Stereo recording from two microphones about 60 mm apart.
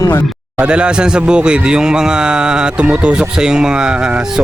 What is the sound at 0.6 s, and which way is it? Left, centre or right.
Speech, centre.